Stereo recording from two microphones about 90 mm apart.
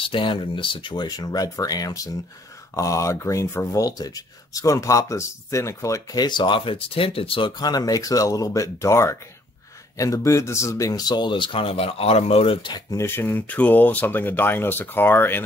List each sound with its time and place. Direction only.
0.0 s speech: 70° left (ahead or behind)
1.0 s speech: 45° left (ahead or behind)
6.1 s speech: 55° left (ahead or behind); by 7.5 s 80° left
7.5 s speech: 50° left (ahead or behind); by 12.7 s 85° left
12.9 s speech: 25° left (ahead or behind)